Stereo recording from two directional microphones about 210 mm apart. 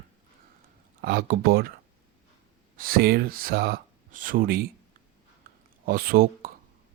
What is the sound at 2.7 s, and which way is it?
Speech, 45° right (ahead or behind).